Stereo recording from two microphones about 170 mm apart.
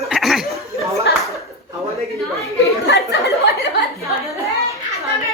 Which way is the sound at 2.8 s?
65° left (ahead or behind).